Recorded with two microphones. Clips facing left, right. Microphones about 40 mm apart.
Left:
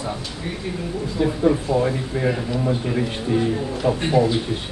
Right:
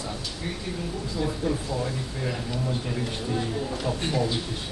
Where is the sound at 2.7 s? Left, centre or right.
Centre.